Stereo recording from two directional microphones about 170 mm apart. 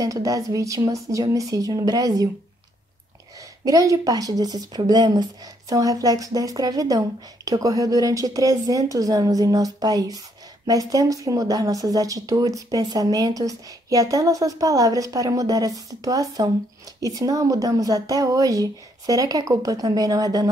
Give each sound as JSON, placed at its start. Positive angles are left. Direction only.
{"t": 0.0, "sound": "speech", "side_deg": -20}
{"t": 3.6, "sound": "speech", "side_deg": -20}